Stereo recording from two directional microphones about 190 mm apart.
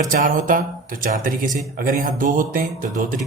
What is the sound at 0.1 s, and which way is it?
Speech, 45° right (ahead or behind).